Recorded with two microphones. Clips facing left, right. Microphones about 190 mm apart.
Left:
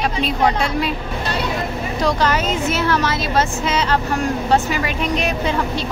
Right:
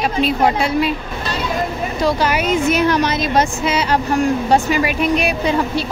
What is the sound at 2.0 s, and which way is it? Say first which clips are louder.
Speech: right 1 dB; 5° right (ahead or behind).